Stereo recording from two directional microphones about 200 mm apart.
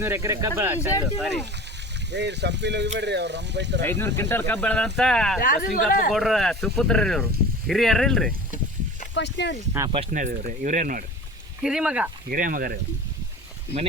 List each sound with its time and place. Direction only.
0.0 s speech: 15° right (ahead or behind)
2.0 s speech: 60° right (ahead or behind)
4.0 s speech: 10° left (ahead or behind)
5.4 s speech: 45° left (ahead or behind)
6.1 s speech: centre (ahead or behind)
9.1 s speech: 60° left (ahead or behind)
9.8 s speech: 15° right (ahead or behind)
10.1 s speech: 40° right (ahead or behind)
11.6 s speech: 5° right (ahead or behind)
12.3 s speech: 45° right (ahead or behind)